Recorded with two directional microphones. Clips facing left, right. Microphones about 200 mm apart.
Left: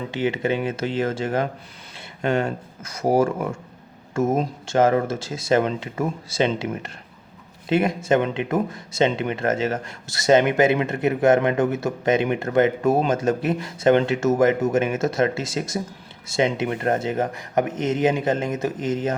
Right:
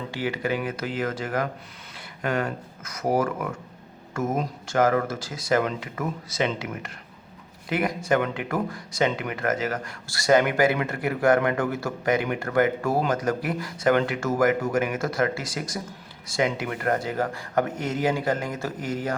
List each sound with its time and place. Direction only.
0.1 s speech: 20° left (ahead or behind)